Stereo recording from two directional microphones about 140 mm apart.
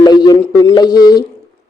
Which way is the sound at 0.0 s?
30° left (ahead or behind).